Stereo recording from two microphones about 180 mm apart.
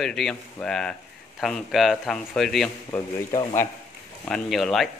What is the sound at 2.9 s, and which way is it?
Speech, 15° left (ahead or behind).